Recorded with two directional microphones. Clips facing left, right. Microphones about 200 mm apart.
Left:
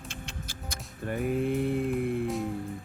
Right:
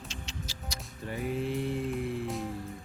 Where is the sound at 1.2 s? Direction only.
55° left (ahead or behind).